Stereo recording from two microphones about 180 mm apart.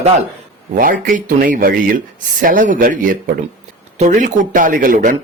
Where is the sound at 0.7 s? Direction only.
50° right (ahead or behind).